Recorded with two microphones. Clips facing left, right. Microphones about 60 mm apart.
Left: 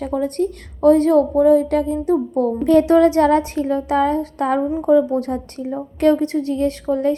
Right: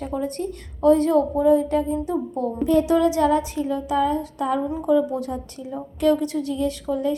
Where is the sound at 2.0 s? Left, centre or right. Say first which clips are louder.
Left 7 dB; left.